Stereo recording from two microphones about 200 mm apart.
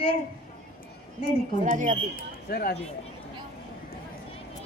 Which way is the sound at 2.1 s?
50° left (ahead or behind).